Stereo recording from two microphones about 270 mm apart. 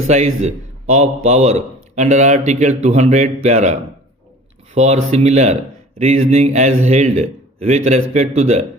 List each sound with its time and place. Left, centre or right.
0.4 s a man's voice: right